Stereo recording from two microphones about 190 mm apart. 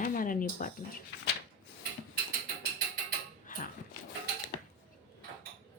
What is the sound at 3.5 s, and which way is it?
Dog, 45° left (ahead or behind).